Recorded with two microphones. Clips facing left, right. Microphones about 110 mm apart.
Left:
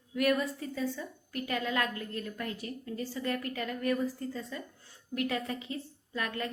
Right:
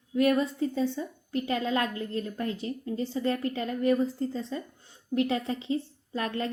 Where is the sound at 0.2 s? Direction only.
25° right (ahead or behind).